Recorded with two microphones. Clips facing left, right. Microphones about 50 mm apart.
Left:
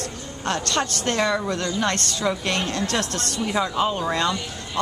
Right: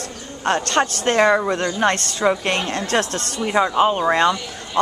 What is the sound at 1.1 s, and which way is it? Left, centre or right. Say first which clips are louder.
A woman's voice: right 7 dB; right.